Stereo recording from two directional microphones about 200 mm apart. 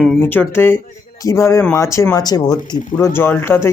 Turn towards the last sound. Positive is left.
turn(degrees=10)  # may be behind; listen again after turning